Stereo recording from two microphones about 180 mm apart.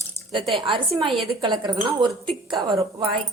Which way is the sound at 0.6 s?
30° right (ahead or behind).